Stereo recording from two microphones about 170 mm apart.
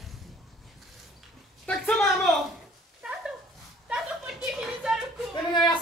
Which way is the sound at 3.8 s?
5° right (ahead or behind).